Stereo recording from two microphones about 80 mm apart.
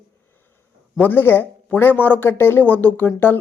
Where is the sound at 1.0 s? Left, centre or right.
Left.